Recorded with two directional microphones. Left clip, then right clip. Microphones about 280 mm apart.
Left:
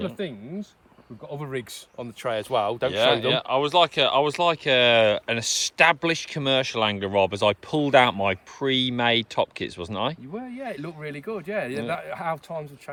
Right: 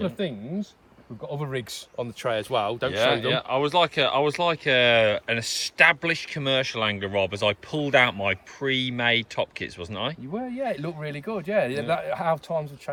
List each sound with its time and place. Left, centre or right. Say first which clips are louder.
0.0 s speech: right 2 dB; centre
2.3 s speech: left 2 dB; centre
10.3 s speech: right 5 dB; centre